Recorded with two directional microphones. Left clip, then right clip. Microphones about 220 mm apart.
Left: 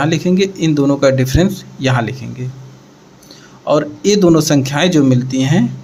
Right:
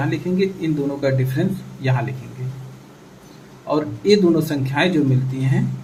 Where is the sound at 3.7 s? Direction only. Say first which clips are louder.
Left 4 dB; 50° left (ahead or behind).